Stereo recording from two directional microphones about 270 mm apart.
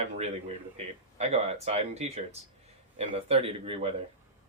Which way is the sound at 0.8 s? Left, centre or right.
Right.